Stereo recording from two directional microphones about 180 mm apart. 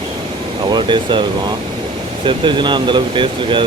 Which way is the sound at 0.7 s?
25° right (ahead or behind).